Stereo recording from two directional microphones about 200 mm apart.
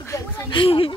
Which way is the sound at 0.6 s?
25° left (ahead or behind).